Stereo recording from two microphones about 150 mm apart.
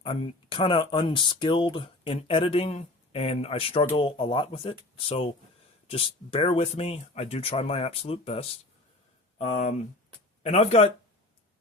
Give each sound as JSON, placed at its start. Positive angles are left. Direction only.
{"t": 0.0, "sound": "speech", "side_deg": 40}